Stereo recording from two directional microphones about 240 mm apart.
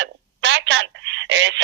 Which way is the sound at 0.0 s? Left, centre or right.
Right.